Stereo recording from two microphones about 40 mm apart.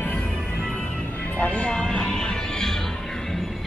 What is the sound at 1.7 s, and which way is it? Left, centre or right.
Music, centre.